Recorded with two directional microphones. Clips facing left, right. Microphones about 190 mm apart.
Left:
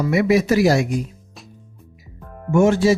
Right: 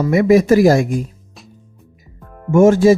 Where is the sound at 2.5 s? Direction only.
45° right (ahead or behind).